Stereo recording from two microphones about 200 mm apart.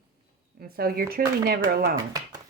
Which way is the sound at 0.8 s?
50° right (ahead or behind).